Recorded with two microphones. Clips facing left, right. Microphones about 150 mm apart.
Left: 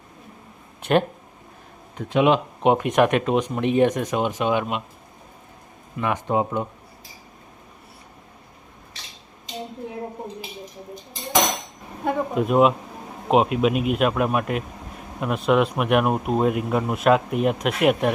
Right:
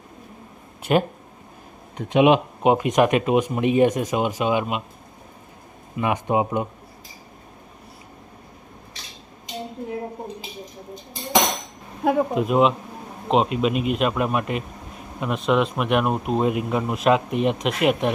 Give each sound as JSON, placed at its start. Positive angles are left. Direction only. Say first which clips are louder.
{"t": 0.8, "sound": "a sound", "louder": "even", "side_deg": -5}
{"t": 2.0, "sound": "speech", "louder": "right 2 dB", "side_deg": -20}
{"t": 2.6, "sound": "a man's voice", "louder": "even", "side_deg": -5}
{"t": 6.0, "sound": "speech", "louder": "right 1 dB", "side_deg": -15}
{"t": 12.0, "sound": "a man's voice", "louder": "right 2 dB", "side_deg": 0}